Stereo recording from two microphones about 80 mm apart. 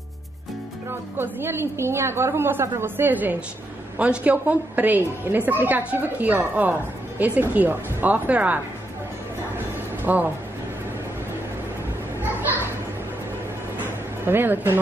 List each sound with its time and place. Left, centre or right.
1.1 s a woman's voice: right
10.1 s a woman's voice: right
12.2 s children playing: right
14.2 s a woman's voice: right